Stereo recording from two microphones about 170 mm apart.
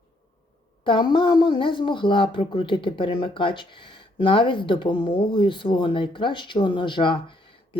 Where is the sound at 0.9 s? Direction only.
25° left (ahead or behind).